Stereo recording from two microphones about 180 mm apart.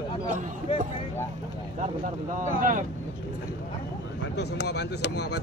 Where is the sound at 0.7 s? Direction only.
30° left (ahead or behind).